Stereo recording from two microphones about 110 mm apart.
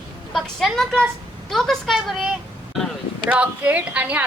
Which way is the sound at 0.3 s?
Centre (ahead or behind).